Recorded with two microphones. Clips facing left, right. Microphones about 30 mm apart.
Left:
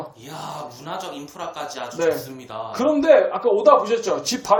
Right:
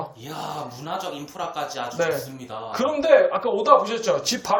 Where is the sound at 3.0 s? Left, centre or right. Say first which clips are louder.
Left 1 dB; centre.